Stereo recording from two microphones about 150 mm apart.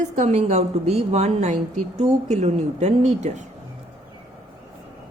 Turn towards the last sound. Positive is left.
turn(degrees=-50)  # may be behind; listen again after turning